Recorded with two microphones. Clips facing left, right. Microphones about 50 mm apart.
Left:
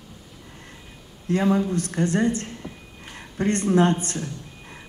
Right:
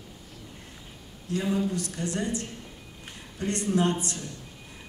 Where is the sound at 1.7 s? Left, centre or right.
Left.